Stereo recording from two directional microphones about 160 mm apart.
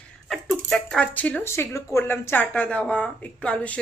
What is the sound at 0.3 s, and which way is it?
Speech, centre (ahead or behind).